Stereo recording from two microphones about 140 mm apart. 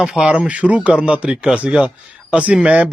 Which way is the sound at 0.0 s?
5° right (ahead or behind).